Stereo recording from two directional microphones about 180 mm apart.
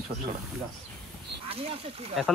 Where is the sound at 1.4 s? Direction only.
35° right (ahead or behind).